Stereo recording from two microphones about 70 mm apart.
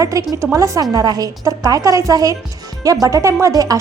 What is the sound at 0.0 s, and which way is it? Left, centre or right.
A woman's voice, right.